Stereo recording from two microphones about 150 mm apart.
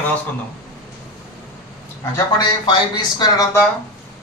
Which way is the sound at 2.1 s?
30° left (ahead or behind).